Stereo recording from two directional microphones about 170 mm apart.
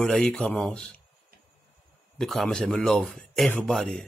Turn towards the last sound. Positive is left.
turn(degrees=5)  # may be behind; listen again after turning